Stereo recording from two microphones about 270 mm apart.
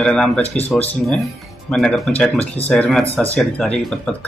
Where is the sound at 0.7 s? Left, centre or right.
Centre.